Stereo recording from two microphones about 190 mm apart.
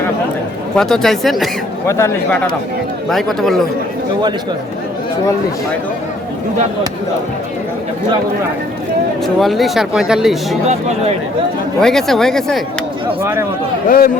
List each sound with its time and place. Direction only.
0.8 s speech: 5° left (ahead or behind)
1.9 s a man's voice: 15° left (ahead or behind)
9.2 s speech: centre (ahead or behind)
10.7 s speech: 35° right (ahead or behind)
11.8 s speech: centre (ahead or behind)
13.8 s speech: 50° left (ahead or behind)